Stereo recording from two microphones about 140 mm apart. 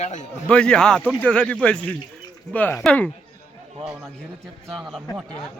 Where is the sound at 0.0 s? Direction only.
55° left (ahead or behind).